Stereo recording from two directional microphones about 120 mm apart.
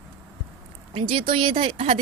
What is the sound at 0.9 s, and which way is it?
A woman's voice, 45° right (ahead or behind).